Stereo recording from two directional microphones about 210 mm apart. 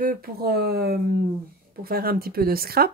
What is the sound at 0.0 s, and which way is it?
Speech, 45° right (ahead or behind).